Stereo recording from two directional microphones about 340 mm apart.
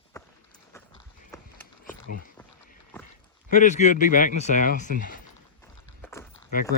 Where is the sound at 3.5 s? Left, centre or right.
Left.